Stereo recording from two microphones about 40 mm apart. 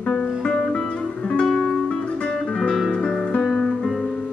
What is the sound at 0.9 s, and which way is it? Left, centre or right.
Music, left.